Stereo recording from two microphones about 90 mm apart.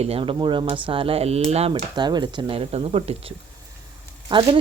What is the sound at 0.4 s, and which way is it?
Speech, 65° right (ahead or behind).